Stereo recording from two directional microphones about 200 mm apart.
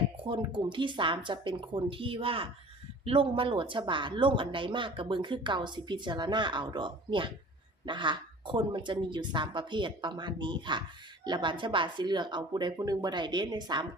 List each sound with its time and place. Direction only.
0.3 s speech: 25° right (ahead or behind)